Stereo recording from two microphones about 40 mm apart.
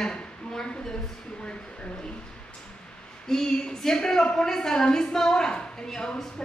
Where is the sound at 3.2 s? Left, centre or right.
Centre.